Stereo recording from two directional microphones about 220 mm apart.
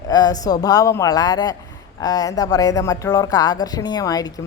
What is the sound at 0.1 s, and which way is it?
A woman's voice, 15° left (ahead or behind).